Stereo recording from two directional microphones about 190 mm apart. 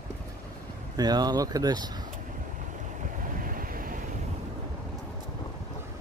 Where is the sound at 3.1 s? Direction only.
45° right (ahead or behind).